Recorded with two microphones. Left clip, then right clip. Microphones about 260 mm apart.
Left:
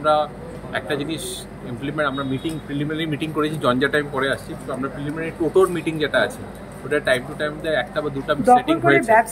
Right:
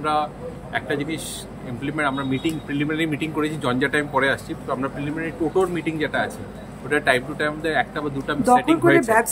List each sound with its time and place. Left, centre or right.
0.0 s speech: centre
5.5 s speech: centre